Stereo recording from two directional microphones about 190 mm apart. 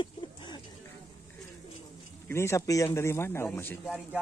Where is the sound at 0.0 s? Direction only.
25° left (ahead or behind).